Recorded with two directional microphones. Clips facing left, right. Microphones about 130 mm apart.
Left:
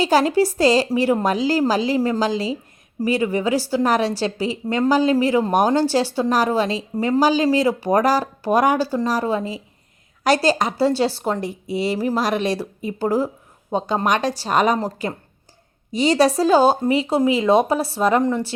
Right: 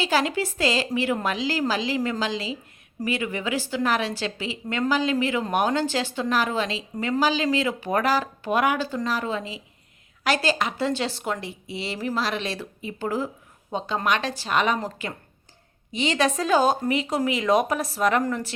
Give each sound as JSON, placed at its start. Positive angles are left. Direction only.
{"t": 0.0, "sound": "a woman's voice", "side_deg": 40}